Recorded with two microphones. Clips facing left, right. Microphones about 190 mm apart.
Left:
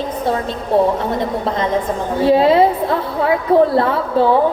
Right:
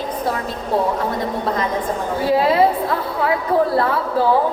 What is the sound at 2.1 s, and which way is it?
A woman's voice, 25° left (ahead or behind).